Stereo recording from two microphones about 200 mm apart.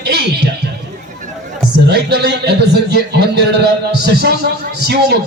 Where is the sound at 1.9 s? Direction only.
55° right (ahead or behind).